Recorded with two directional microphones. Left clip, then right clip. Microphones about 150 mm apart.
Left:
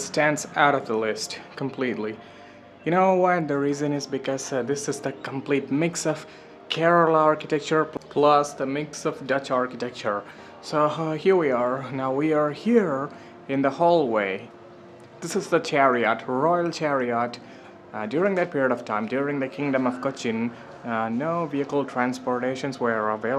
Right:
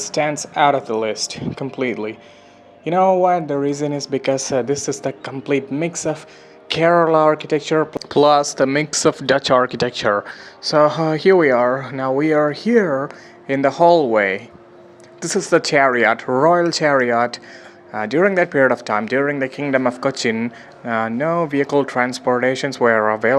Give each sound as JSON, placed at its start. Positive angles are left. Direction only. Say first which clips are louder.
{"t": 0.0, "sound": "speech", "louder": "right 3 dB", "side_deg": -15}
{"t": 6.7, "sound": "speech", "louder": "right 5 dB", "side_deg": -25}
{"t": 7.9, "sound": "speech", "louder": "right 6 dB", "side_deg": -40}
{"t": 10.7, "sound": "speech", "louder": "right 9 dB", "side_deg": -30}
{"t": 20.3, "sound": "speech", "louder": "right 5 dB", "side_deg": -15}